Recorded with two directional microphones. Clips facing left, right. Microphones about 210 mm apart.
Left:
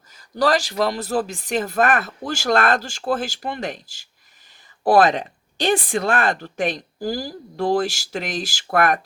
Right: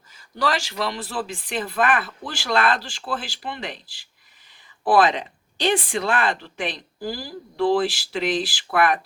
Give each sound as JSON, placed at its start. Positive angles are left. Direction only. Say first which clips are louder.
{"t": 0.1, "sound": "speech", "louder": "left 5 dB", "side_deg": 40}